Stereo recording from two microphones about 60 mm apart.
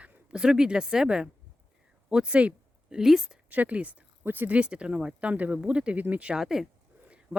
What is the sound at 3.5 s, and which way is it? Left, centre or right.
Speech, right.